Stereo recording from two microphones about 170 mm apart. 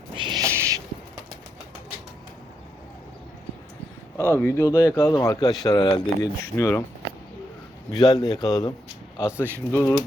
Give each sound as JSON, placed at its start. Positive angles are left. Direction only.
{"t": 0.1, "sound": "owl", "side_deg": -30}
{"t": 4.4, "sound": "speech", "side_deg": 15}
{"t": 7.9, "sound": "speech", "side_deg": 20}
{"t": 9.4, "sound": "speech", "side_deg": 10}